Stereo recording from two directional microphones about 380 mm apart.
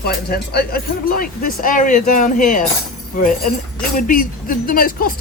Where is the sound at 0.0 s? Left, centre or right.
Left.